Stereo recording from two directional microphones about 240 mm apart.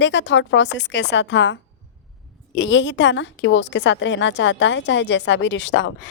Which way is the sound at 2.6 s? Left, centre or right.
Left.